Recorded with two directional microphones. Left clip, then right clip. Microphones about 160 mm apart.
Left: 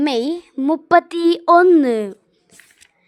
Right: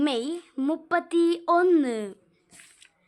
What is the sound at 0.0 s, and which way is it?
Speech, 30° left (ahead or behind).